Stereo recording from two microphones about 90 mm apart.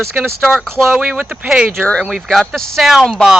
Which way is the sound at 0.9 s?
10° right (ahead or behind).